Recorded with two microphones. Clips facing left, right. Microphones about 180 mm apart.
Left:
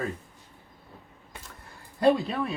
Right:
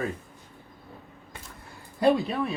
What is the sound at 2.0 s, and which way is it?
Speech, centre (ahead or behind).